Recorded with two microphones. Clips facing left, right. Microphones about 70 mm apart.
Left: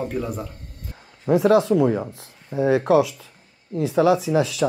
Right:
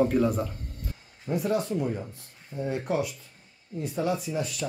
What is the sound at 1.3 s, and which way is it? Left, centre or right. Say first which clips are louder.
Speech: left 11 dB; left.